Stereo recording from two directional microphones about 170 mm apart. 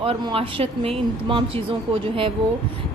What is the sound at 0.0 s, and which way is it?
A woman's voice, 35° right (ahead or behind).